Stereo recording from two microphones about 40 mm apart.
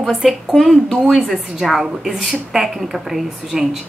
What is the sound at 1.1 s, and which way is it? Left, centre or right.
Speech, centre.